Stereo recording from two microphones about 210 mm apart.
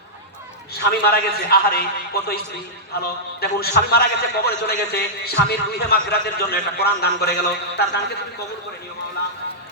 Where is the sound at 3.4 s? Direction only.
50° left (ahead or behind).